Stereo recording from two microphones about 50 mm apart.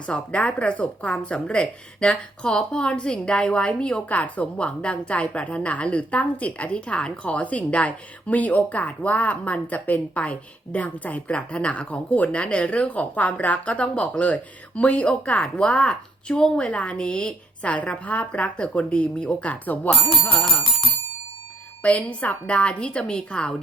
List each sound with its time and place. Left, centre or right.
0.0 s a woman's voice: left
19.9 s speech: centre
21.8 s a woman's voice: left